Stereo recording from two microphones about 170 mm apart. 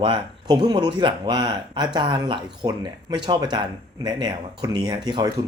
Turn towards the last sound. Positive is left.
turn(degrees=-25)  # may be behind; listen again after turning